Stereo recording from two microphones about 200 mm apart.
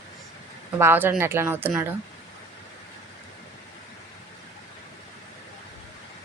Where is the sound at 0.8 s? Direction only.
10° right (ahead or behind).